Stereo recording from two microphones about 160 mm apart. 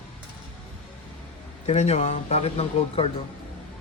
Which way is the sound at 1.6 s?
40° left (ahead or behind).